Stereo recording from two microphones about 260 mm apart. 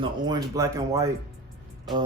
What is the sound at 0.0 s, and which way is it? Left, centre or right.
Speech, centre.